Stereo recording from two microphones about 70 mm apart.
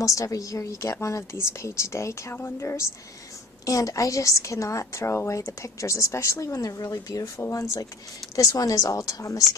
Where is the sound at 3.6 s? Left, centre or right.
Left.